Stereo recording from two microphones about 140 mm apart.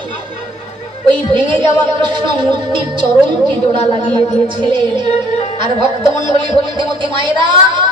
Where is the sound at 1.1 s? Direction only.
35° right (ahead or behind).